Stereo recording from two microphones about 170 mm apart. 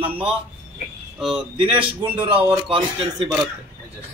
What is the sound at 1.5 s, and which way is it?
A man's voice, 30° right (ahead or behind).